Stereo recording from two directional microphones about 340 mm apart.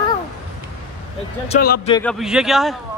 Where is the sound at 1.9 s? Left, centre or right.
Centre.